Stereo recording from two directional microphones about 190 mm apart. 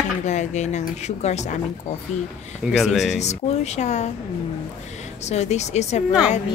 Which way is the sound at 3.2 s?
35° left (ahead or behind).